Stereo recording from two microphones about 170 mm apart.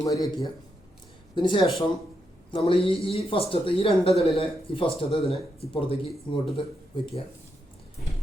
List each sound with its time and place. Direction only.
0.0 s speech: 25° left (ahead or behind)